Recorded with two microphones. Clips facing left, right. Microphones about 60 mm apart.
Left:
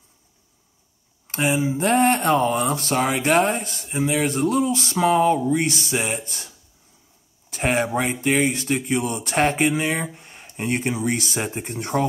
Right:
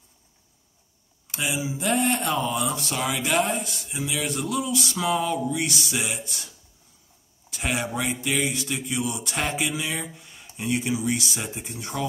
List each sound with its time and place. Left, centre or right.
1.2 s speech: left